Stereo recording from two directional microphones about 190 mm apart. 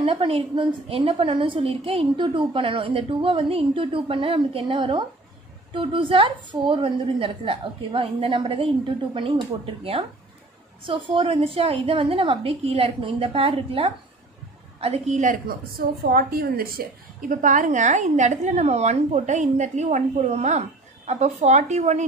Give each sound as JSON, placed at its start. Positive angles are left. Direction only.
{"t": 0.0, "sound": "a woman's voice", "side_deg": -30}
{"t": 10.8, "sound": "a woman's voice", "side_deg": -25}
{"t": 16.0, "sound": "a woman's voice", "side_deg": -55}